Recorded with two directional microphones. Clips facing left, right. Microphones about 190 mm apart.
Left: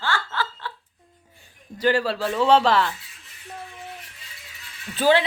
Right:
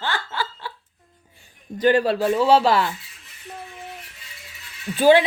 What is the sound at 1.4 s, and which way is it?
Speech, 20° right (ahead or behind).